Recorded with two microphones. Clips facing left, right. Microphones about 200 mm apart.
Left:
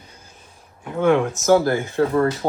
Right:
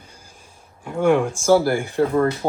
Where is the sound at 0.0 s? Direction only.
10° right (ahead or behind).